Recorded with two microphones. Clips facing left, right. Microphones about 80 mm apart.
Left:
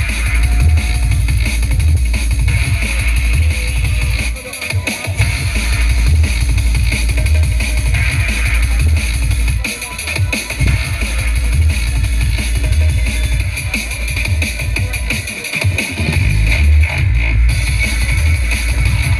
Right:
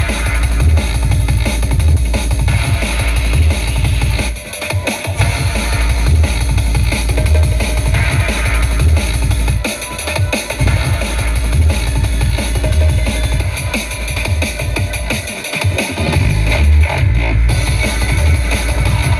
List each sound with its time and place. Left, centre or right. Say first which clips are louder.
2.1 s music: right 3 dB; right
6.9 s music: right 5 dB; right
9.7 s music: right 5 dB; right
15.0 s music: right 3 dB; right
18.5 s music: right 4 dB; right